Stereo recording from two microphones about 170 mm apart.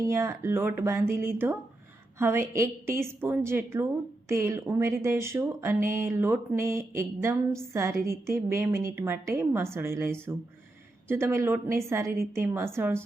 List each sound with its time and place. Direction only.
0.0 s speech: 15° right (ahead or behind)